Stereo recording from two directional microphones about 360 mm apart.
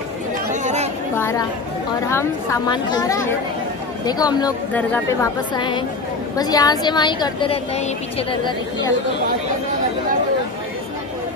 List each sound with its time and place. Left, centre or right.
0.5 s chatter: centre
1.1 s a sound: centre
2.0 s a woman's voice: centre